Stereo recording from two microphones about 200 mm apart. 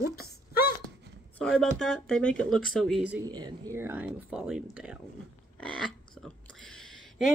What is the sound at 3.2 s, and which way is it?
Speech, 20° right (ahead or behind).